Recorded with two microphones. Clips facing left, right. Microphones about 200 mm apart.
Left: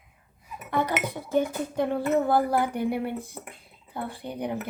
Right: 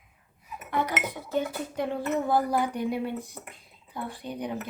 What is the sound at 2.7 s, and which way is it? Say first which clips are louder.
Speech: left 2 dB; 60° left (ahead or behind).